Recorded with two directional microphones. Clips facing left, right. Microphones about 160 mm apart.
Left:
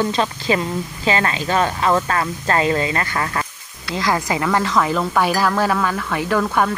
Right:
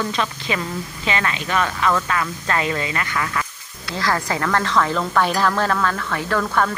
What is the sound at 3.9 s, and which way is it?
Speech, 15° left (ahead or behind).